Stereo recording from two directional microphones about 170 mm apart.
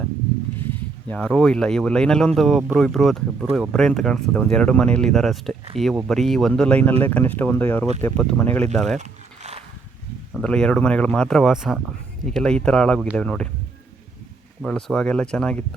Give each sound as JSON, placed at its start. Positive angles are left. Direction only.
{"t": 1.0, "sound": "speech", "side_deg": 5}
{"t": 9.0, "sound": "zipper", "side_deg": -40}
{"t": 10.3, "sound": "speech", "side_deg": 5}
{"t": 14.6, "sound": "speech", "side_deg": 0}